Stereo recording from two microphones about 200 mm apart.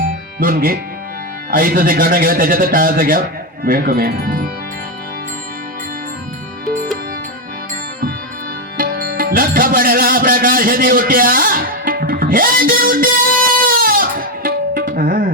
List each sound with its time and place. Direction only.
0.3 s a man's voice: 45° right (ahead or behind)
8.8 s music: 45° right (ahead or behind)